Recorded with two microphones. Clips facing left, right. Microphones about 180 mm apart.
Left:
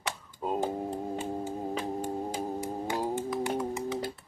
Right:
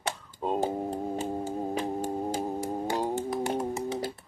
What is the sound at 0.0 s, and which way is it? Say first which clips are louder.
Music: right 3 dB; 30° right (ahead or behind).